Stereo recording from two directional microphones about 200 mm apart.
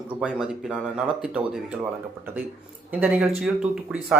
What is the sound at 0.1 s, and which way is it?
Speech, 5° right (ahead or behind).